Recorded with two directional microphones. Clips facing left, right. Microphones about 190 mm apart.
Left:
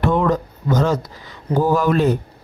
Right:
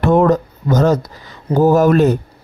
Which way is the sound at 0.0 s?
45° right (ahead or behind).